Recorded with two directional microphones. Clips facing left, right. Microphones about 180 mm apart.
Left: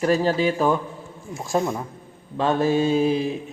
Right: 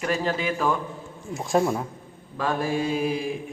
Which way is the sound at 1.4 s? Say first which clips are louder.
Right 1 dB; centre (ahead or behind).